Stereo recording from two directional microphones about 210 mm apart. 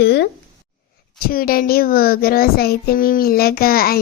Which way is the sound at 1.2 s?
45° left (ahead or behind).